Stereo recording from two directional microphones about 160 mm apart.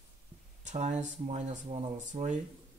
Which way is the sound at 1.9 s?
50° right (ahead or behind).